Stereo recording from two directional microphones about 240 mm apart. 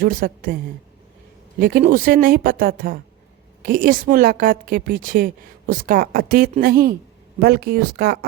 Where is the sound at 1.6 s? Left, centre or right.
Right.